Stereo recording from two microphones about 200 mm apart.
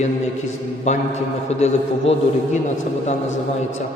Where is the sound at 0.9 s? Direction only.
35° left (ahead or behind).